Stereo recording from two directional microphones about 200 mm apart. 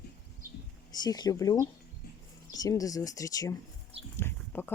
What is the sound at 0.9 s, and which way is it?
Speech, 20° left (ahead or behind).